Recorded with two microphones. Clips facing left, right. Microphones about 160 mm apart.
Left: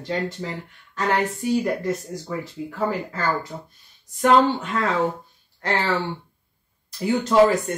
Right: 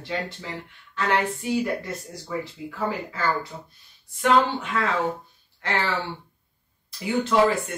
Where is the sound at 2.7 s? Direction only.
45° left (ahead or behind).